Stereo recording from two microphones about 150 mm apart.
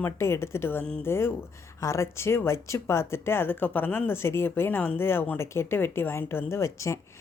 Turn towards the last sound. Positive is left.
turn(degrees=20)  # may be behind; listen again after turning